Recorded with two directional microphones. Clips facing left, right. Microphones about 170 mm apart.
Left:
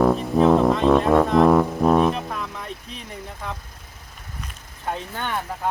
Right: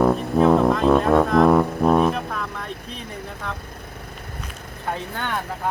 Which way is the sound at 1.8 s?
Centre (ahead or behind).